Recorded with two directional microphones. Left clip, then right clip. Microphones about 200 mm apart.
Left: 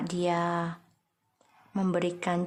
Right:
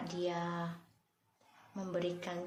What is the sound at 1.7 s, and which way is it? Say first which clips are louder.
Speech: left 8 dB; 55° left (ahead or behind).